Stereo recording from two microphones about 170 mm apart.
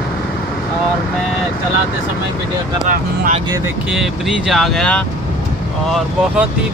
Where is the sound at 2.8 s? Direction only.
50° right (ahead or behind).